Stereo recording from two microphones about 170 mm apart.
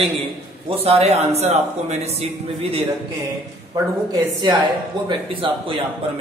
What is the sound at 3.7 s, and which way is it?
A woman's voice, 25° right (ahead or behind).